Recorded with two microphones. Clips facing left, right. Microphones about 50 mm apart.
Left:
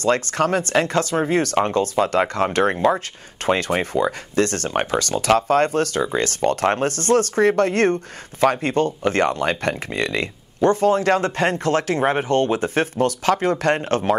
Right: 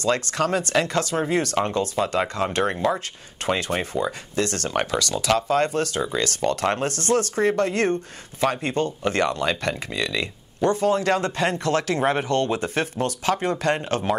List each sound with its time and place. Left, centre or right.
0.0 s speech: left